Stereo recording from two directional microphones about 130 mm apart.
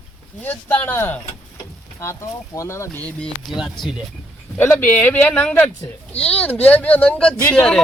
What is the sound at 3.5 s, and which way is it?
Speech, centre (ahead or behind).